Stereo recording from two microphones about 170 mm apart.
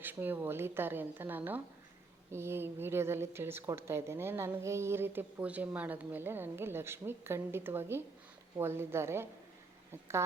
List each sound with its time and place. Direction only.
0.0 s speech: 10° right (ahead or behind)